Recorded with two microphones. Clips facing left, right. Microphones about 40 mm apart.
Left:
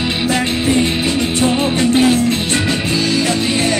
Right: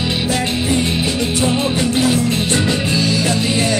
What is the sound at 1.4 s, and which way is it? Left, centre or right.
Music, left.